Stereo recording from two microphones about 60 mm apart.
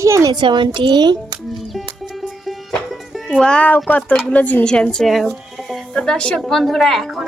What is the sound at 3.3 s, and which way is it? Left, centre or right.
A woman's voice, centre.